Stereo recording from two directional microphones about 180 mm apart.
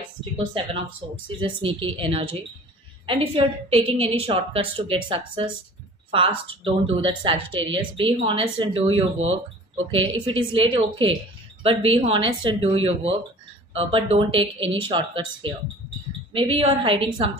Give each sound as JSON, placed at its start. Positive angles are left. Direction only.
{"t": 0.6, "sound": "a woman's voice", "side_deg": -30}